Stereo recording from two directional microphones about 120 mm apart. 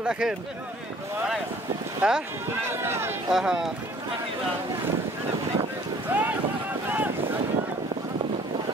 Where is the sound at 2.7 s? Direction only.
20° right (ahead or behind).